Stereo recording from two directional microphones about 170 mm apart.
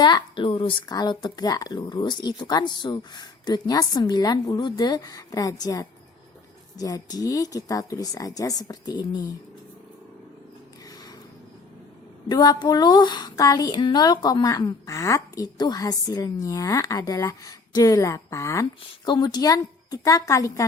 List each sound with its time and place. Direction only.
0.0 s speech: 30° left (ahead or behind)
12.3 s speech: 25° left (ahead or behind)